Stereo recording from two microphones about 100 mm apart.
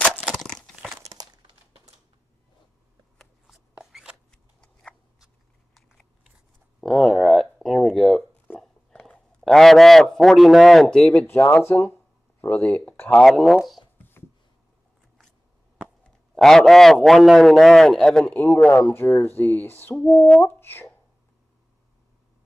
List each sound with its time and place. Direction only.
0.3 s a sound: 5° left (ahead or behind)
3.2 s shuffling cards: centre (ahead or behind)
4.3 s scissors: 5° left (ahead or behind)
5.8 s biting: centre (ahead or behind)
6.8 s a sound: 5° left (ahead or behind)
9.0 s a man's voice: 5° left (ahead or behind)
11.2 s speech: 20° left (ahead or behind)
13.1 s a man's voice: 5° left (ahead or behind)
16.3 s a man's voice: 5° left (ahead or behind)
18.3 s speech: 15° left (ahead or behind)
20.0 s a man's voice: 5° left (ahead or behind)
20.4 s speech: 25° left (ahead or behind)